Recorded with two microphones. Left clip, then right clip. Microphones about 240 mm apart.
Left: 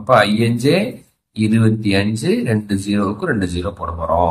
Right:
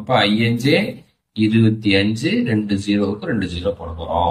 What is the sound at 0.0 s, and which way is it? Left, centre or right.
Speech, centre.